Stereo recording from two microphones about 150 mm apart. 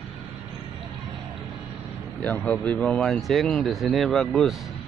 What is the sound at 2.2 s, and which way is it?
Speech, 10° left (ahead or behind).